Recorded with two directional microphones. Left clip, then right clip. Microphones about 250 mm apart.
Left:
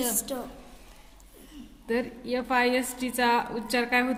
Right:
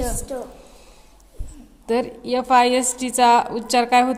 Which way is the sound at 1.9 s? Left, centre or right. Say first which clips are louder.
Right 8 dB; right.